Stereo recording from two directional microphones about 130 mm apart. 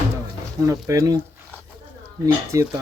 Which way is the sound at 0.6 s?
25° right (ahead or behind).